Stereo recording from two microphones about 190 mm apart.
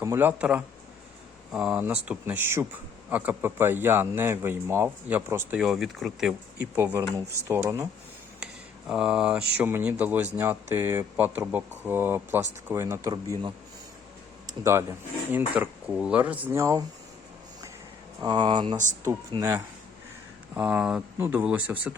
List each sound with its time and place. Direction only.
0.0 s speech: 10° right (ahead or behind)
8.9 s speech: 5° right (ahead or behind)
14.6 s speech: 15° right (ahead or behind)
18.2 s speech: 25° right (ahead or behind); by 21.9 s 5° right (ahead or behind)